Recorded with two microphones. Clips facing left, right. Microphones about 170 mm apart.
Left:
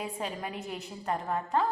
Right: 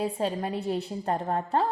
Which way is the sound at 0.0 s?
30° right (ahead or behind).